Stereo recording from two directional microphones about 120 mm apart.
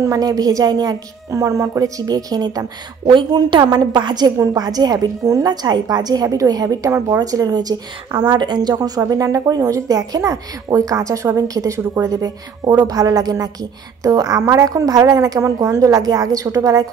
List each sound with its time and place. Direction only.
0.0 s a woman's voice: 30° right (ahead or behind)